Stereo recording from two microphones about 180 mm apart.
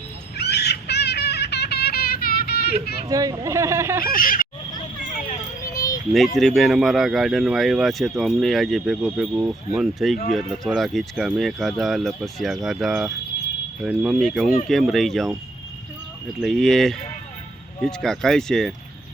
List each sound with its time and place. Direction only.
0.3 s bird: 65° left (ahead or behind)
3.1 s speech: 20° right (ahead or behind)
4.2 s speech: 50° left (ahead or behind)
5.1 s children playing: 40° left (ahead or behind)
6.1 s speech: centre (ahead or behind)
9.8 s speech: centre (ahead or behind)
16.4 s speech: centre (ahead or behind)